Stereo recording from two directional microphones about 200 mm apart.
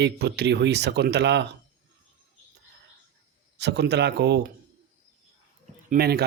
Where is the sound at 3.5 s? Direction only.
55° right (ahead or behind).